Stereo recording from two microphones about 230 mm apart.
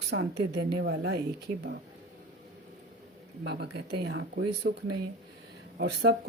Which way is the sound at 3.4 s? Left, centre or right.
Right.